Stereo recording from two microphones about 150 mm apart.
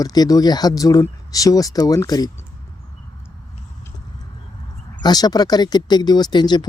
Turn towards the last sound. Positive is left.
turn(degrees=30)  # may be behind; listen again after turning